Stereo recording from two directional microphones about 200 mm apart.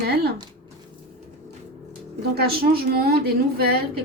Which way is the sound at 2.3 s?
50° right (ahead or behind).